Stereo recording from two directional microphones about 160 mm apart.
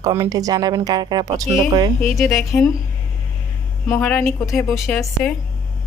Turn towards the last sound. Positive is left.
turn(degrees=5)  # may be behind; listen again after turning